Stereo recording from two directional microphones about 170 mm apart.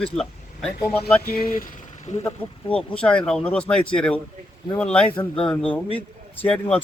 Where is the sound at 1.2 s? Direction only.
60° left (ahead or behind).